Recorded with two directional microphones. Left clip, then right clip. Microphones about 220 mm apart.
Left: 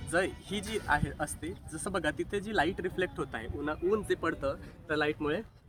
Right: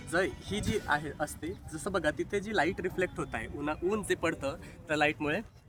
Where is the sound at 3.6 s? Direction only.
45° right (ahead or behind).